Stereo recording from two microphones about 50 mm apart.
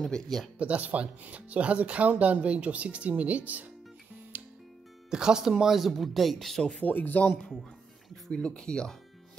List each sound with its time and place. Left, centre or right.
0.0 s speech: centre
0.6 s speech: right
4.3 s music: right
5.1 s speech: centre
6.8 s speech: left
8.3 s speech: left